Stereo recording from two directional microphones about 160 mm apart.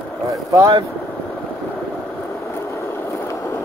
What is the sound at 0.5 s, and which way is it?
Speech, 25° right (ahead or behind).